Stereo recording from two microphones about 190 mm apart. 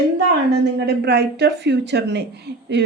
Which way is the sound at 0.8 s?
60° right (ahead or behind).